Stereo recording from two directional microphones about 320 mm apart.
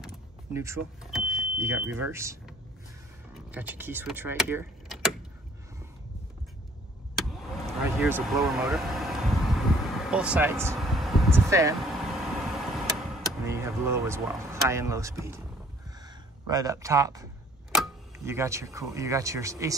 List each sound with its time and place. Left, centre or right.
0.0 s vehicle: centre
2.0 s speech: centre
8.0 s speech: centre
9.8 s a sound: centre
16.4 s speech: centre